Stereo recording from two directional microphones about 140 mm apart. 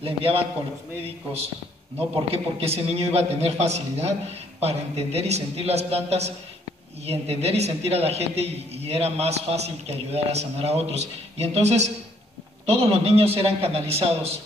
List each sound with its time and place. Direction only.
0.0 s a man's voice: 40° right (ahead or behind)
2.0 s a man's voice: 45° right (ahead or behind)